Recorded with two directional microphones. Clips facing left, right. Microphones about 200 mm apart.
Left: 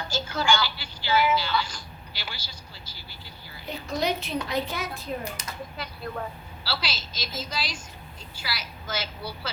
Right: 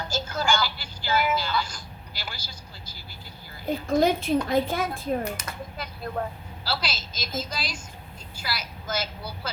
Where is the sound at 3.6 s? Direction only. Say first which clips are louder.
Right 6 dB; 50° right (ahead or behind).